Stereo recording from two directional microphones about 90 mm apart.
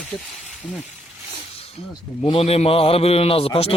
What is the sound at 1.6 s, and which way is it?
Speech, 90° left.